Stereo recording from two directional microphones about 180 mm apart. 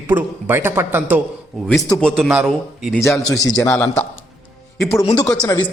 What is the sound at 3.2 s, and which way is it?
Speech, 20° left (ahead or behind).